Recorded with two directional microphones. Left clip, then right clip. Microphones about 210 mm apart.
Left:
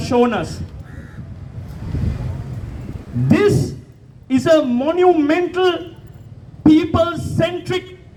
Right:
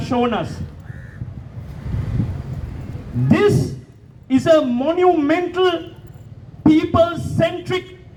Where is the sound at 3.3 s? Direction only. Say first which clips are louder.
Left 1 dB; 30° left (ahead or behind).